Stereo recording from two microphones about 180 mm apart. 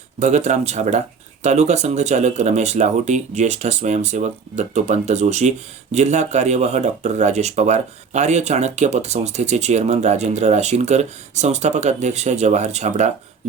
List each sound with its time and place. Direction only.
0.2 s speech: 40° right (ahead or behind)